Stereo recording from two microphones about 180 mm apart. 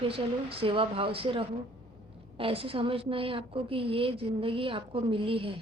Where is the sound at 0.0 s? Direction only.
30° right (ahead or behind).